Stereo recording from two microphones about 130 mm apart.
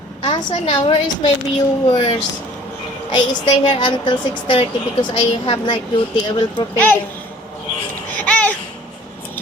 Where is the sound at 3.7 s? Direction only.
40° left (ahead or behind).